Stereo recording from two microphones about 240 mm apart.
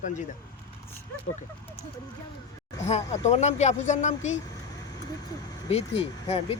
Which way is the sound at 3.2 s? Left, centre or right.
Left.